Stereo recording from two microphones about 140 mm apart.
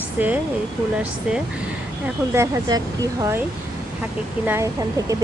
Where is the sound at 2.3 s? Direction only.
25° right (ahead or behind).